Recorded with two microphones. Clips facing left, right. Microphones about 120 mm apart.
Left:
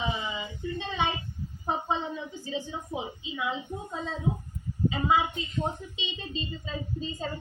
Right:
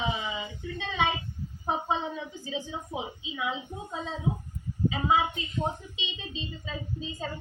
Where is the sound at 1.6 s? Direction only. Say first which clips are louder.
Even; 15° right (ahead or behind).